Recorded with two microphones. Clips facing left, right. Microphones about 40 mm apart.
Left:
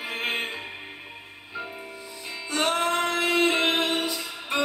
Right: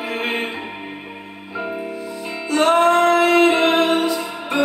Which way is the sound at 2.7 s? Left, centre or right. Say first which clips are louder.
Right 13 dB; right.